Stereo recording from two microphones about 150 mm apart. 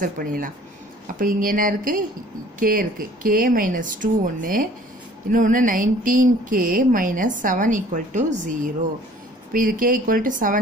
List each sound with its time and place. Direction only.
0.0 s speech: 70° right (ahead or behind)
9.5 s speech: 70° right (ahead or behind)